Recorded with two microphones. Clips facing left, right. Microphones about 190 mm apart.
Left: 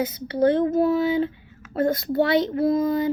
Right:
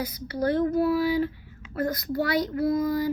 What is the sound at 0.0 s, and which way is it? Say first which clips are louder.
Child singing: left 7 dB; 25° left (ahead or behind).